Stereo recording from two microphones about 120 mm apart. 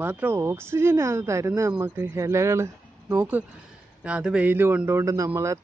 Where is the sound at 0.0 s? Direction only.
15° right (ahead or behind).